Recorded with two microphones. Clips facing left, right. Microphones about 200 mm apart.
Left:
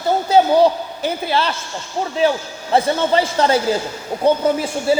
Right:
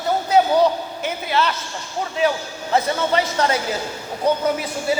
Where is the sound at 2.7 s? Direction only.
30° left (ahead or behind).